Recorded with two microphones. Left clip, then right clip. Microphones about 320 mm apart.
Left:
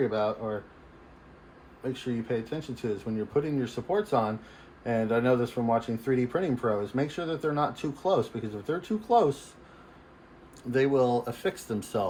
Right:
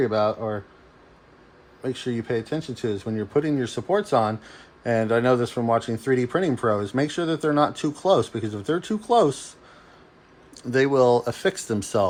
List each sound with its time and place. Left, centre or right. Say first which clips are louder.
0.0 s speech: right 6 dB; right
1.8 s speech: right 5 dB; right
10.7 s speech: right 6 dB; right